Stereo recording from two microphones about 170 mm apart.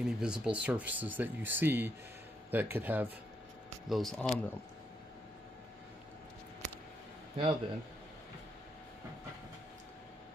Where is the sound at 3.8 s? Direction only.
Centre (ahead or behind).